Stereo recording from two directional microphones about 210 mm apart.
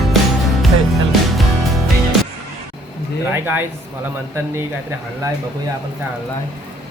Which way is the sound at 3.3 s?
10° right (ahead or behind).